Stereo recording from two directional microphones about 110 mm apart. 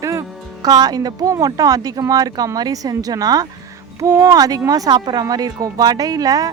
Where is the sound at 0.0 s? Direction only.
30° right (ahead or behind).